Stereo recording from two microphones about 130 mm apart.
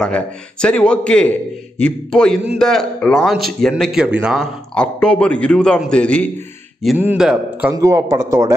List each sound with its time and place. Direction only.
0.0 s a man's voice: 5° left (ahead or behind)
4.7 s a man's voice: 10° left (ahead or behind)
7.0 s a man's voice: 10° right (ahead or behind)
7.7 s speech: 25° right (ahead or behind)